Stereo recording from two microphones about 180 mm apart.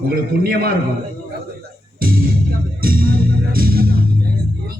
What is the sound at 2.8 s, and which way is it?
Music, 55° right (ahead or behind).